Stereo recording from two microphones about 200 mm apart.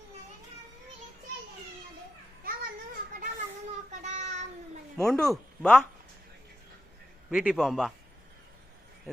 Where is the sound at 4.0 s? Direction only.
35° right (ahead or behind).